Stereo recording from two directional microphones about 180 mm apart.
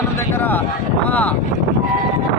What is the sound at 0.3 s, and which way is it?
Speech, 10° left (ahead or behind).